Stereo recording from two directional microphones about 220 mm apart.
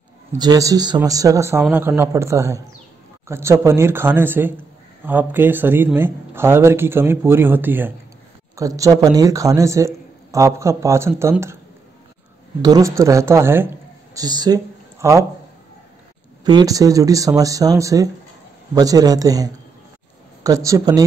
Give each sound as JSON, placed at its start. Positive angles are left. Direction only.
{"t": 0.3, "sound": "a man's voice", "side_deg": -15}
{"t": 12.6, "sound": "a man's voice", "side_deg": -15}
{"t": 16.4, "sound": "a man's voice", "side_deg": -15}